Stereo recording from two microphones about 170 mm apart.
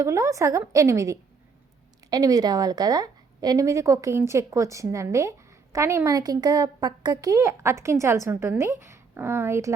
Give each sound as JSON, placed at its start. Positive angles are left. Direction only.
{"t": 0.0, "sound": "a woman's voice", "side_deg": -15}